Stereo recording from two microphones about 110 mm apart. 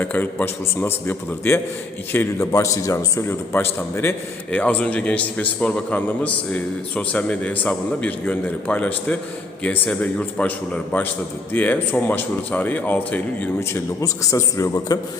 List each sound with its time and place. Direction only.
0.0 s a man's voice: 15° left (ahead or behind)
13.6 s a man's voice: 30° left (ahead or behind)